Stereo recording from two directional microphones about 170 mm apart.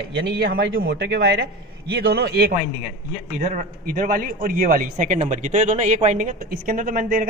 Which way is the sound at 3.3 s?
55° right (ahead or behind).